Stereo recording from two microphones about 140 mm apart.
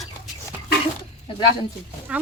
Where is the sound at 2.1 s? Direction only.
10° right (ahead or behind).